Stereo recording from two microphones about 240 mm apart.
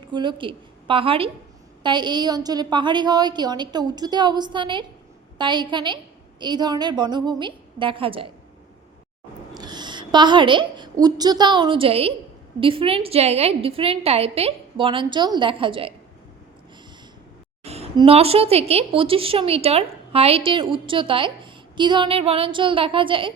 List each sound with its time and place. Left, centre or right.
0.1 s a woman's voice: centre
9.6 s a sound: centre
11.0 s a woman's voice: centre
17.6 s a woman's voice: right